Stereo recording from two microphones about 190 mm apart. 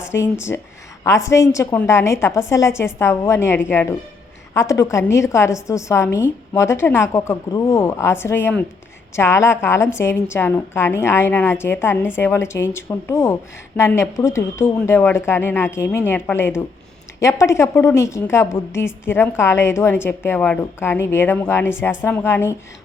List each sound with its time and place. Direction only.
0.1 s speech: 60° left (ahead or behind)
0.5 s a woman's voice: 10° left (ahead or behind)